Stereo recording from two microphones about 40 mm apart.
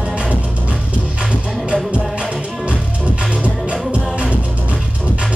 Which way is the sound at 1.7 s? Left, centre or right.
Right.